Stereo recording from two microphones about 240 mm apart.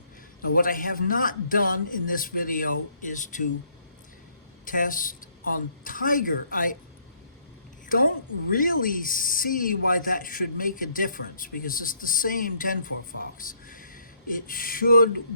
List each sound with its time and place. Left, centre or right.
0.4 s speech: left
4.6 s speech: left
7.9 s speech: left